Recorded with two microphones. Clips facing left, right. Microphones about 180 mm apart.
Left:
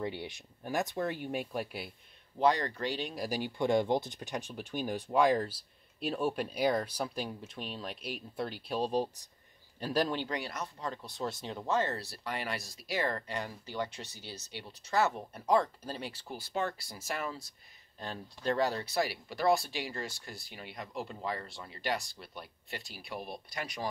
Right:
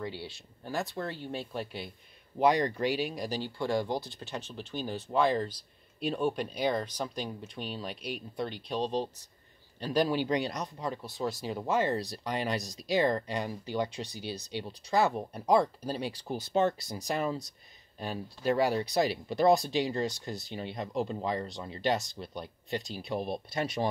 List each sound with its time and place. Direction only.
0.0 s speech: 20° left (ahead or behind)
2.3 s speech: 15° right (ahead or behind)
3.2 s a man's voice: 10° left (ahead or behind)
10.1 s speech: 20° right (ahead or behind)
11.1 s speech: centre (ahead or behind); by 23.9 s 25° right (ahead or behind)